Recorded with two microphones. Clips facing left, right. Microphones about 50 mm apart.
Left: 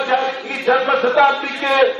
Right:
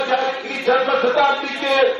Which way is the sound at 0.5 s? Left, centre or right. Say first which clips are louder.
Left 1 dB; centre.